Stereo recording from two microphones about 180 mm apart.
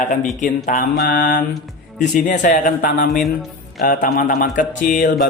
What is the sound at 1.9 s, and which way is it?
Speech, 45° left (ahead or behind).